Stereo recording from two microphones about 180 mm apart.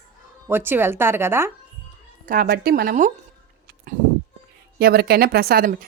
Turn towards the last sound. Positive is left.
turn(degrees=-55)  # may be behind; listen again after turning